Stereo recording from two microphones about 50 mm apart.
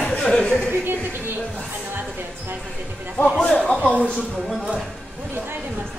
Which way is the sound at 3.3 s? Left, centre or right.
Centre.